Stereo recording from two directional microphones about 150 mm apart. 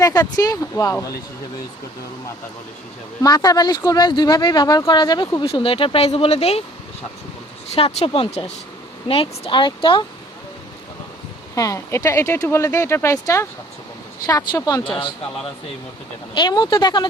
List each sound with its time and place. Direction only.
0.0 s speech: 25° left (ahead or behind)
3.2 s speech: 25° left (ahead or behind); by 6.6 s 40° left (ahead or behind)
7.8 s speech: 40° left (ahead or behind)
11.5 s speech: 20° left (ahead or behind)
16.3 s speech: 30° left (ahead or behind)